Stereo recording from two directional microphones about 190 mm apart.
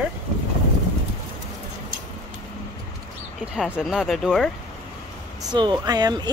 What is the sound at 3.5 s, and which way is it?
Speech, 5° right (ahead or behind).